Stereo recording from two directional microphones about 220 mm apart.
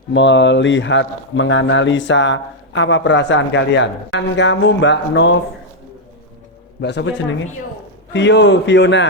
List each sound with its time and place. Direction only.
0.1 s a man's voice: 55° left (ahead or behind)
6.8 s a man's voice: 50° left (ahead or behind)
8.1 s a man's voice: 50° left (ahead or behind)